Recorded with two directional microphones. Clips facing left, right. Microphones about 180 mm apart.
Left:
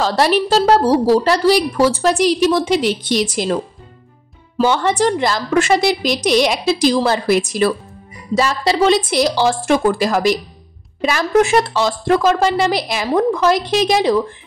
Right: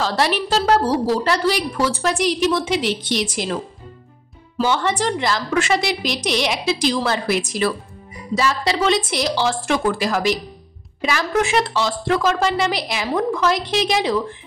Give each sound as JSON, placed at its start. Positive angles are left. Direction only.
{"t": 0.0, "sound": "a woman's voice", "side_deg": 40}
{"t": 4.6, "sound": "a woman's voice", "side_deg": 45}